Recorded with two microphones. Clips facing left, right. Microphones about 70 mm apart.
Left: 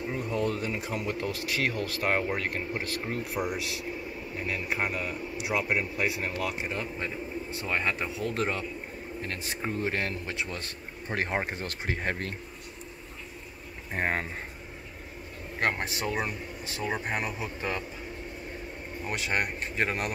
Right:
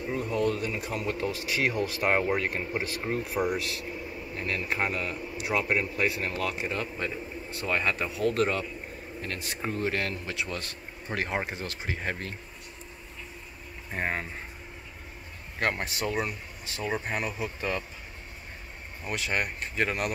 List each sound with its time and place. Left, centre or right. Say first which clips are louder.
0.1 s speech: right 3 dB; left
1.1 s speech: right 1 dB; centre
3.3 s a man's voice: right 3 dB; centre; by 12.4 s left
13.9 s speech: left 2 dB; left
15.6 s speech: even; left
19.0 s speech: even; left